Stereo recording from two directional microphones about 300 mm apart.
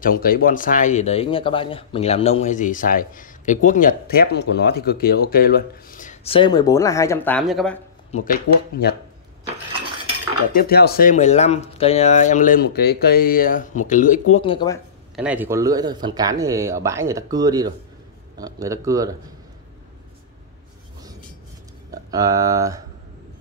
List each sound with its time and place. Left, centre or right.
0.0 s speech: left; by 7.8 s centre
8.1 s speech: left
10.5 s speech: left
15.1 s speech: centre
22.1 s speech: centre